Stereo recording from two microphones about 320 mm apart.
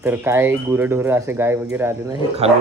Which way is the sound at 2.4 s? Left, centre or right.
Centre.